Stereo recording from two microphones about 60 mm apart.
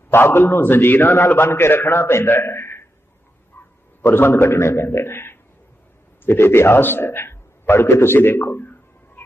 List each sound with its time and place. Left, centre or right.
0.1 s a man's voice: left
4.0 s a man's voice: left